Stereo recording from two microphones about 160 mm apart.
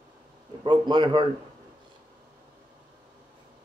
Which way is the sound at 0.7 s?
30° right (ahead or behind).